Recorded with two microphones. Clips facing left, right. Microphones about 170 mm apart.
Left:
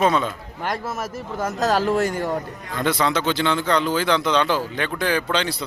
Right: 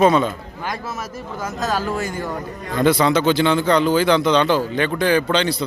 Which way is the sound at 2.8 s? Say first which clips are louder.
Right 5 dB; 5° right (ahead or behind).